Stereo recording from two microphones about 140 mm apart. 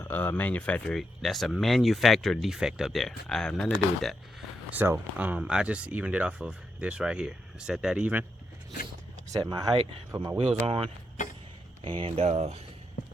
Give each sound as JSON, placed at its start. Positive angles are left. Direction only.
{"t": 0.0, "sound": "speech", "side_deg": 15}
{"t": 4.7, "sound": "speech", "side_deg": -15}
{"t": 9.3, "sound": "speech", "side_deg": -30}